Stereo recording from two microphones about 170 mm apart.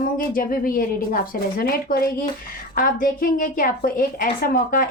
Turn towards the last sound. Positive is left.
turn(degrees=55)  # may be behind; listen again after turning